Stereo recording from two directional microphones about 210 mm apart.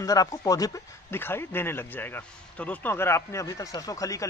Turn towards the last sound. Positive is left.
turn(degrees=15)  # may be behind; listen again after turning